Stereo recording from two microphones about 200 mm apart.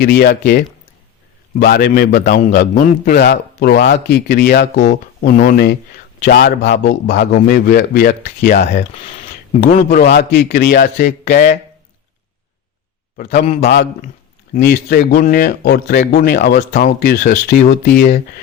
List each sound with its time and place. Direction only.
0.0 s a man's voice: 50° left (ahead or behind)
5.2 s a man's voice: 40° left (ahead or behind); by 7.3 s 60° left (ahead or behind)
7.3 s a man's voice: 45° left (ahead or behind)
8.6 s a man's voice: 30° left (ahead or behind)
13.6 s a man's voice: 55° left (ahead or behind)